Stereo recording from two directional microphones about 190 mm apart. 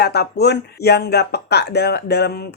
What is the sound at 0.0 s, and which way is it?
Speech, 55° left (ahead or behind).